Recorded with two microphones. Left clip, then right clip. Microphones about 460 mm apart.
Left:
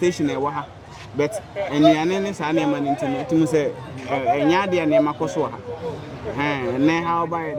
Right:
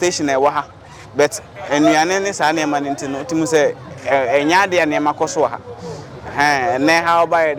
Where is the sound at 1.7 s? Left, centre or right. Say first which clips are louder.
Right 4 dB; right.